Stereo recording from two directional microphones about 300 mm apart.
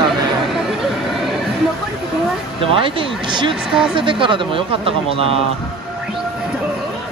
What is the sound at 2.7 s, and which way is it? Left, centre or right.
Speech, centre.